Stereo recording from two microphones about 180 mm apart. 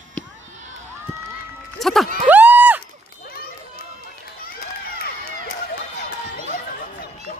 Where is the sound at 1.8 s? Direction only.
Centre (ahead or behind).